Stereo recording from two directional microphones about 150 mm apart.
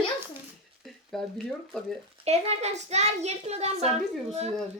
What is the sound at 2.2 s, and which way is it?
A child's voice, 45° right (ahead or behind).